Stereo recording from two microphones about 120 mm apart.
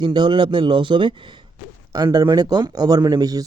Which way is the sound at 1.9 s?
30° right (ahead or behind).